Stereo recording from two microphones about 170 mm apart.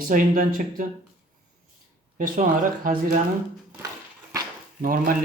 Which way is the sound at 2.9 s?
55° right (ahead or behind).